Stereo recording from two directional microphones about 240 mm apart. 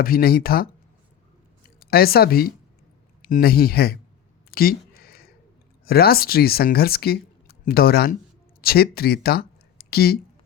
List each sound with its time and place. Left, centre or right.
0.0 s speech: left
1.8 s speech: left
4.5 s a sound: left
5.8 s speech: left